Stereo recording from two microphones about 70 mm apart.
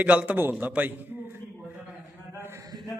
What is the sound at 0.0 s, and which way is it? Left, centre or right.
A man's voice, right.